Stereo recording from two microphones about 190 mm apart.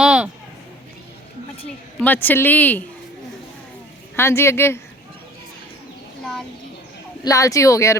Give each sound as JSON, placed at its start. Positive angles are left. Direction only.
{"t": 0.0, "sound": "a sound", "side_deg": -5}
{"t": 2.0, "sound": "speech", "side_deg": 10}
{"t": 4.1, "sound": "speech", "side_deg": 15}
{"t": 7.3, "sound": "speech", "side_deg": 15}